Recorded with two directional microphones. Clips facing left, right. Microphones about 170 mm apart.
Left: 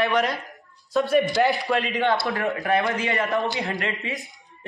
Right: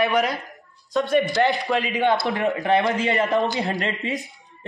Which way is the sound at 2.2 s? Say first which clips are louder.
Right 3 dB; 20° right (ahead or behind).